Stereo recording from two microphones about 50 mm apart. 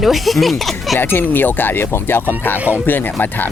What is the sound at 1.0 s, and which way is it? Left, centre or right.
Speech, left.